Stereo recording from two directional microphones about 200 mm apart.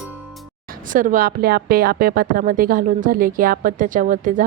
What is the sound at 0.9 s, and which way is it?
A woman's voice, 40° right (ahead or behind).